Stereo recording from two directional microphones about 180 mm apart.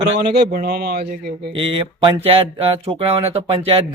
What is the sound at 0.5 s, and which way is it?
A man's voice, 55° right (ahead or behind).